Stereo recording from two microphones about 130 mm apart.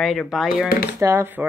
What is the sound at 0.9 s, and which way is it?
Speech, 20° right (ahead or behind).